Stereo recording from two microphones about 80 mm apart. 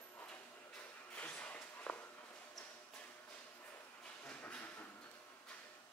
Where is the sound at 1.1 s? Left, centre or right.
Centre.